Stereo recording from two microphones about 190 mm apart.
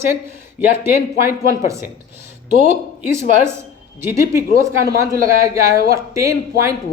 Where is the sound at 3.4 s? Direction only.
15° right (ahead or behind).